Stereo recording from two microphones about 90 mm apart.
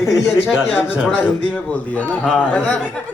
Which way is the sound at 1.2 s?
15° left (ahead or behind).